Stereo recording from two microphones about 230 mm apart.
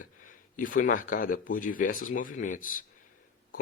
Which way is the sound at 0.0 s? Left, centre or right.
Left.